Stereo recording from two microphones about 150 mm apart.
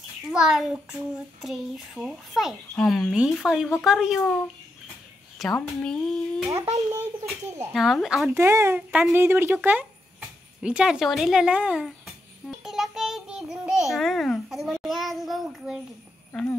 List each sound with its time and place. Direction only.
0.3 s child singing: 5° right (ahead or behind)
5.4 s child singing: 5° left (ahead or behind)
6.5 s a child's voice: 20° right (ahead or behind)
7.7 s child singing: centre (ahead or behind)
8.4 s speech: 15° right (ahead or behind)
10.6 s child singing: 5° right (ahead or behind)
12.4 s a child's voice: centre (ahead or behind)